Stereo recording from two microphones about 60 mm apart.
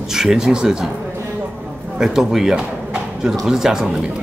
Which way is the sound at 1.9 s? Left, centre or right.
Centre.